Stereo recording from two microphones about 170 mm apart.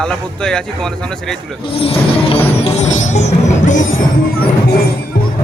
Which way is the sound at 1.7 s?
35° left (ahead or behind).